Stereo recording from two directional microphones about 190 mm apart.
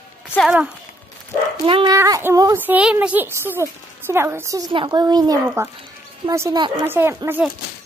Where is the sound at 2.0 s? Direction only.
15° right (ahead or behind).